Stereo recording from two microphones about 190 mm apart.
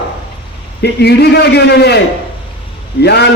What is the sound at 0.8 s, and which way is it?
A man's voice, 60° left (ahead or behind).